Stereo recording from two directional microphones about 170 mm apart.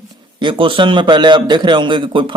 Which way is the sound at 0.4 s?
30° right (ahead or behind).